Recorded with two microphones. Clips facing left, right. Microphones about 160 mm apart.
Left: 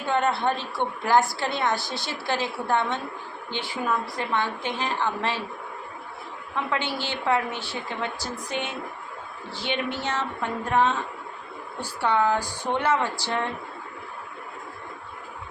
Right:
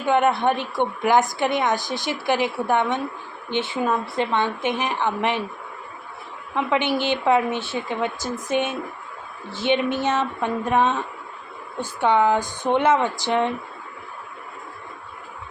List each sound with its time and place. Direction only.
0.0 s a woman's voice: 15° right (ahead or behind)
6.6 s speech: 20° right (ahead or behind)
11.9 s speech: 20° right (ahead or behind)